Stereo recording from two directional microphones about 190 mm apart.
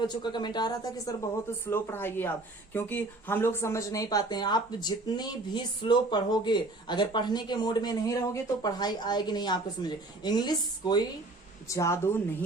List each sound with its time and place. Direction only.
0.1 s speech: 25° left (ahead or behind)